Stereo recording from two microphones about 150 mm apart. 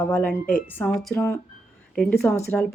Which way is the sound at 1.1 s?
20° left (ahead or behind).